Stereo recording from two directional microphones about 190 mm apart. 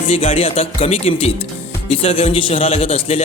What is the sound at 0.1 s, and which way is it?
Music, 30° left (ahead or behind).